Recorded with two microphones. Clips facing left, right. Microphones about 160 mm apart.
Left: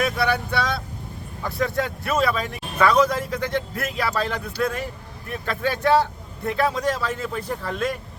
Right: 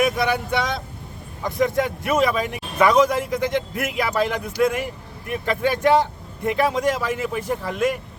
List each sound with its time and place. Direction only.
0.0 s speech: 15° right (ahead or behind)